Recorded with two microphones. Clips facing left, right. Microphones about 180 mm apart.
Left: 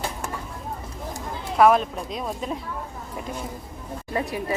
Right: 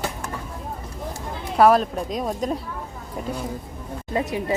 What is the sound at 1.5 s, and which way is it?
Speech, 35° right (ahead or behind).